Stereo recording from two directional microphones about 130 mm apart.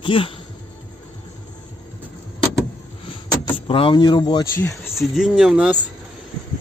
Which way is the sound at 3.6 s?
45° left (ahead or behind).